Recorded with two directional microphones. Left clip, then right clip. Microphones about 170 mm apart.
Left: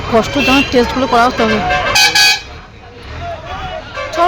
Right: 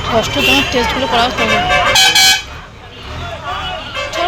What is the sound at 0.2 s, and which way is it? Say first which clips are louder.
Speech: left 1 dB; 55° left (ahead or behind).